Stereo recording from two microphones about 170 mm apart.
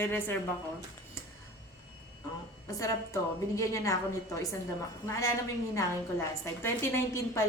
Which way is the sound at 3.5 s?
20° left (ahead or behind).